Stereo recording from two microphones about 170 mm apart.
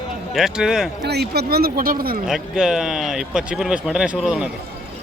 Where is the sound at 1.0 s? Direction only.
75° right (ahead or behind); by 2.1 s 60° right (ahead or behind).